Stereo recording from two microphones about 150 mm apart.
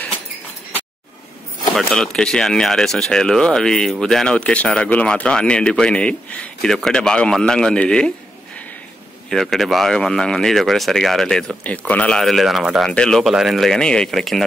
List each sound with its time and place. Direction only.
1.8 s speech: centre (ahead or behind)
9.3 s speech: centre (ahead or behind)